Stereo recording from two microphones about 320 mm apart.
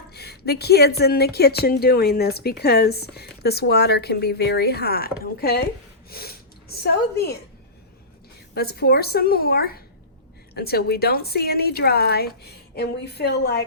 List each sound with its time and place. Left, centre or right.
0.1 s a woman's voice: left
8.5 s a woman's voice: left